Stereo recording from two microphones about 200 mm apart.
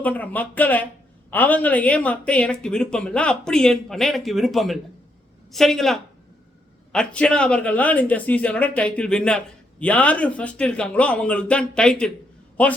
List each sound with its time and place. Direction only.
0.0 s a man's voice: 10° left (ahead or behind)